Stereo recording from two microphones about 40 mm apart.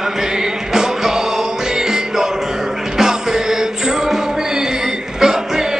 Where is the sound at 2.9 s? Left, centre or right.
Centre.